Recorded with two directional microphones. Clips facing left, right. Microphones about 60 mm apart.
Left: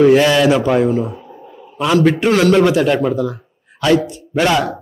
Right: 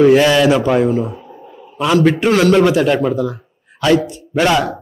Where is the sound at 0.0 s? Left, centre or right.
Centre.